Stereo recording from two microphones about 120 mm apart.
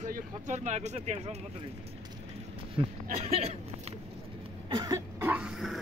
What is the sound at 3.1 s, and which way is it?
Speech, 65° right (ahead or behind).